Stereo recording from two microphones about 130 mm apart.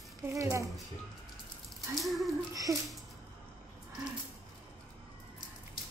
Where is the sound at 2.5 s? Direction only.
25° right (ahead or behind).